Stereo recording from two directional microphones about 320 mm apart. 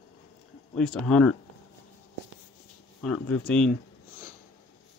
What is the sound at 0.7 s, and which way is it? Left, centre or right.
Speech, centre.